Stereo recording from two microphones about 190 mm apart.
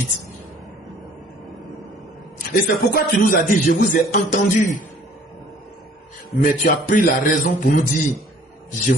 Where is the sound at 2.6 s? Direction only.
50° left (ahead or behind).